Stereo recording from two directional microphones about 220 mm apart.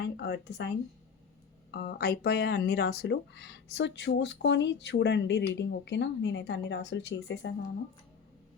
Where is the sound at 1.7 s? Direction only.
45° left (ahead or behind).